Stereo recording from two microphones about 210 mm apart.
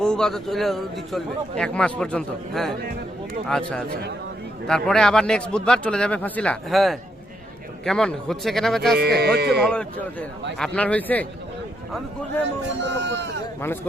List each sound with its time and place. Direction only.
0.0 s a man's voice: 5° left (ahead or behind)
9.0 s music: 50° right (ahead or behind)
9.6 s a man's voice: 5° left (ahead or behind)
12.8 s speech: 55° right (ahead or behind)